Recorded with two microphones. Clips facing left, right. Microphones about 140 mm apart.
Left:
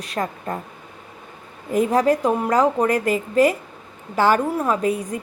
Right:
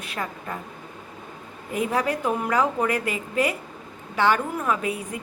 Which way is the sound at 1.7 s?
40° left (ahead or behind).